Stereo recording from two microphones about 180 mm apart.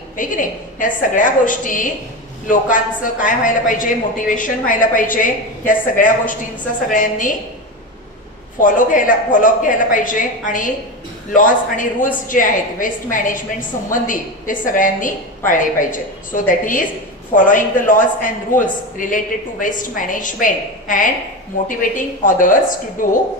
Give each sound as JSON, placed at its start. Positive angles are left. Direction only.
{"t": 0.1, "sound": "a man's voice", "side_deg": 45}
{"t": 8.5, "sound": "a man's voice", "side_deg": 45}